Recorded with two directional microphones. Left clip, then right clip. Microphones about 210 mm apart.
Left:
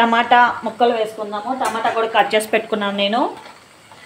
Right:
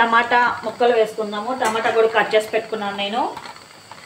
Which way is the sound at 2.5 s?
50° left (ahead or behind).